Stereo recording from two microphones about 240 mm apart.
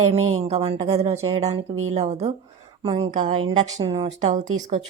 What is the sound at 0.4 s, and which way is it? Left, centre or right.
Speech, right.